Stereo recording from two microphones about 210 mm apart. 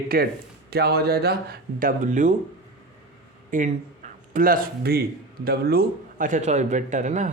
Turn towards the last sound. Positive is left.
turn(degrees=-35)  # may be behind; listen again after turning